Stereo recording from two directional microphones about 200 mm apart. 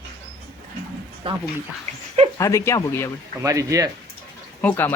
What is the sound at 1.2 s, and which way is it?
Speech, 25° right (ahead or behind).